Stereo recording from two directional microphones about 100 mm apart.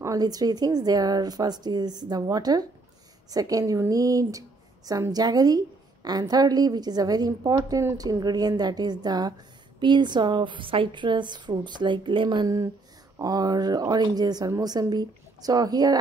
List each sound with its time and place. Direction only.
0.0 s a woman's voice: 35° right (ahead or behind); by 12.4 s 55° right (ahead or behind)
12.4 s a woman's voice: 35° right (ahead or behind)